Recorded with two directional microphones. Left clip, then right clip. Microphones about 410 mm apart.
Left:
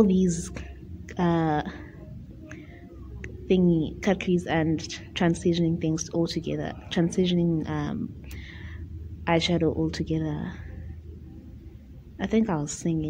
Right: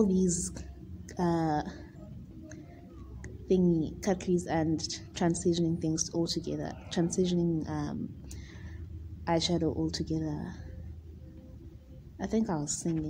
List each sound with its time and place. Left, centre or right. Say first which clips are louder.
0.0 s a woman's voice: left 5 dB; left
3.2 s a woman's voice: left 4 dB; left
9.2 s a woman's voice: left 6 dB; left
12.2 s a woman's voice: left 6 dB; left